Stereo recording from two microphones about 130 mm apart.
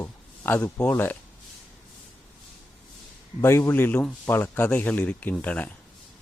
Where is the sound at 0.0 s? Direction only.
15° left (ahead or behind).